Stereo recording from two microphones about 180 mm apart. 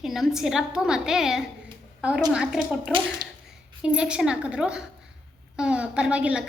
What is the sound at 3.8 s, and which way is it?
A woman's voice, 5° right (ahead or behind).